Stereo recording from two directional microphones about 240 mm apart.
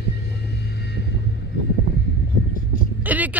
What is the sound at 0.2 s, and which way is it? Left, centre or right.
Vehicle, left.